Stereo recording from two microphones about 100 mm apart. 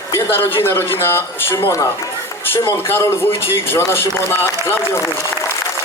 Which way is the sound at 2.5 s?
25° left (ahead or behind).